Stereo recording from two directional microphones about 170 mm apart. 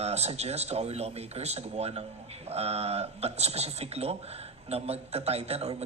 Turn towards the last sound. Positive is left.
turn(degrees=-40)  # may be behind; listen again after turning